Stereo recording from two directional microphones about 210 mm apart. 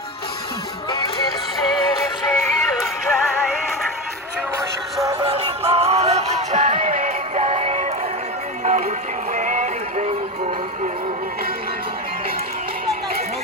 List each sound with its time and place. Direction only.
2.2 s music: centre (ahead or behind)
5.2 s music: 25° right (ahead or behind)